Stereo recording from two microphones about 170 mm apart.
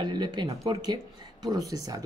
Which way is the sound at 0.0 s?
25° right (ahead or behind).